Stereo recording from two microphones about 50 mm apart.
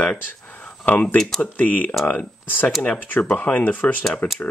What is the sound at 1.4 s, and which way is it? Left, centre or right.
Speech, left.